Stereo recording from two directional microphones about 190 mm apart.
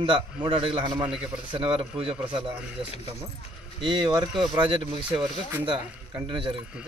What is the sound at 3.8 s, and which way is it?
Speech, 25° right (ahead or behind).